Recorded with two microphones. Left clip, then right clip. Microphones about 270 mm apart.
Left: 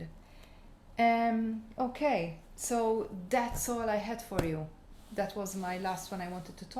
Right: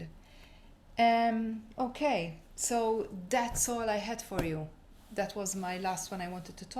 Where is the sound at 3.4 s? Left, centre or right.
Centre.